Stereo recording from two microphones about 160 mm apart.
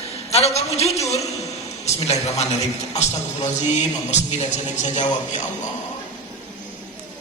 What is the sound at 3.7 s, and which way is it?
Speech, 45° left (ahead or behind).